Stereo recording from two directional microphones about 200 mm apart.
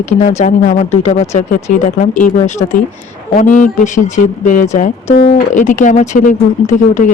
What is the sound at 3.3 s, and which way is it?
Speech, 40° left (ahead or behind).